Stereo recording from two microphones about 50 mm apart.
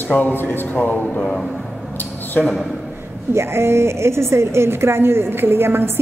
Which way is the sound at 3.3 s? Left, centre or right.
Right.